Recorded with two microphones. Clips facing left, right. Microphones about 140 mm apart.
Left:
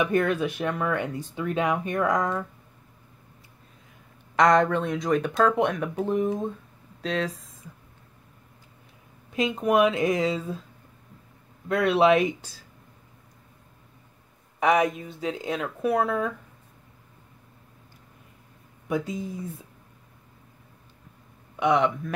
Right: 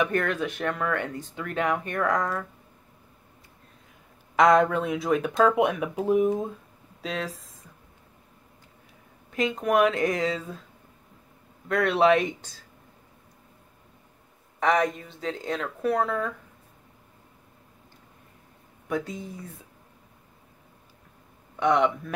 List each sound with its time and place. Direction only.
0.0 s speech: 15° left (ahead or behind)
4.4 s speech: centre (ahead or behind)
9.3 s speech: 20° left (ahead or behind)
11.7 s speech: 5° left (ahead or behind)
14.6 s speech: 10° left (ahead or behind)
18.9 s speech: 10° left (ahead or behind)
21.5 s speech: 5° left (ahead or behind)